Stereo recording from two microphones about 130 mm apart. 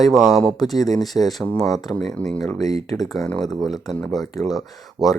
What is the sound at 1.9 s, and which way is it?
Speech, 5° left (ahead or behind).